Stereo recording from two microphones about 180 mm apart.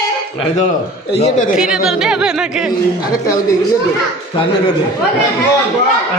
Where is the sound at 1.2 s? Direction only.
40° left (ahead or behind).